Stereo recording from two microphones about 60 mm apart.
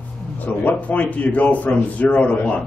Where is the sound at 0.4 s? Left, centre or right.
Left.